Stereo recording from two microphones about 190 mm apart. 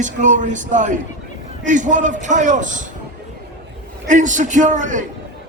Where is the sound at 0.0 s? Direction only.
40° right (ahead or behind).